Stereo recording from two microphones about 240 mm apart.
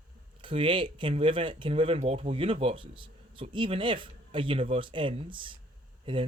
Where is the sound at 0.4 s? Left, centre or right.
Right.